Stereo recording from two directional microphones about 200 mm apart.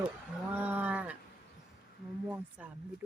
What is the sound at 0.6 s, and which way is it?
Speech, 10° right (ahead or behind).